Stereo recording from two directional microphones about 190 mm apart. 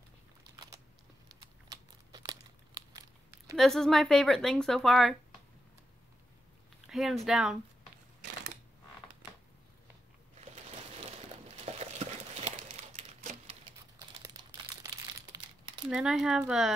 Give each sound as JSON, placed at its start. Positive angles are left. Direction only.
{"t": 1.7, "sound": "crumpling", "side_deg": -20}
{"t": 3.5, "sound": "speech", "side_deg": 0}
{"t": 6.9, "sound": "speech", "side_deg": 0}
{"t": 10.5, "sound": "a sound", "side_deg": -35}
{"t": 11.6, "sound": "crumpling", "side_deg": -35}
{"t": 14.2, "sound": "crumpling", "side_deg": -20}
{"t": 15.9, "sound": "speech", "side_deg": -5}